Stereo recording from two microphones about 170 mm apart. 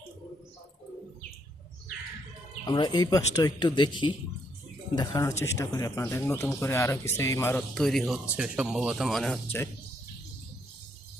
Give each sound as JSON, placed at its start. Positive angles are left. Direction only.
{"t": 2.6, "sound": "speech", "side_deg": 25}
{"t": 7.7, "sound": "speech", "side_deg": 0}